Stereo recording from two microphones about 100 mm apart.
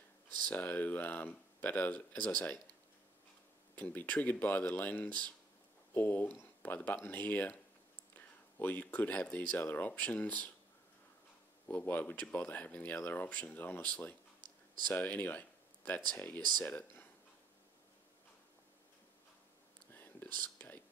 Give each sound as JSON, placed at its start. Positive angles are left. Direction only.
{"t": 0.5, "sound": "speech", "side_deg": 15}
{"t": 3.7, "sound": "speech", "side_deg": 15}
{"t": 11.6, "sound": "speech", "side_deg": 20}
{"t": 19.9, "sound": "whispering", "side_deg": 20}